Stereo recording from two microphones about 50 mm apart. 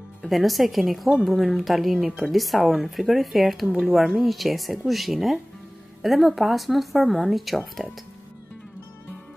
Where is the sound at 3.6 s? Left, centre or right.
Right.